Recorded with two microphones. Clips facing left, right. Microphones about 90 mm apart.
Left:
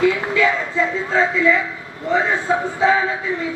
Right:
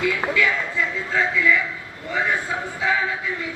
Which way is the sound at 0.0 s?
30° left (ahead or behind).